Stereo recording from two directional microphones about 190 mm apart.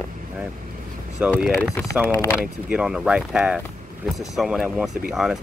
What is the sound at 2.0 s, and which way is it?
Speech, 15° left (ahead or behind).